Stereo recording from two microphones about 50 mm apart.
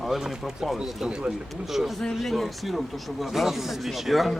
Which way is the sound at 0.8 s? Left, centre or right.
Centre.